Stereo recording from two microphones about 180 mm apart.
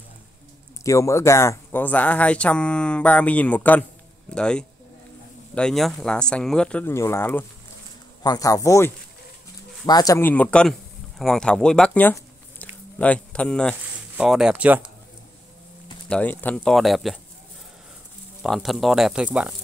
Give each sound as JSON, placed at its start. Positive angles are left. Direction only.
{"t": 0.8, "sound": "a man's voice", "side_deg": 15}
{"t": 16.1, "sound": "speech", "side_deg": 10}
{"t": 18.4, "sound": "speech", "side_deg": 0}